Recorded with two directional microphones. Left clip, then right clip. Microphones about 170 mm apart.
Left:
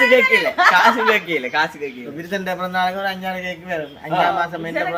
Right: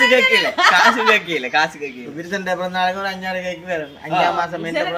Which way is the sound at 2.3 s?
20° left (ahead or behind).